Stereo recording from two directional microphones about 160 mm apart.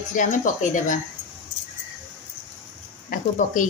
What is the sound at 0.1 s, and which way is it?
Speech, 55° left (ahead or behind).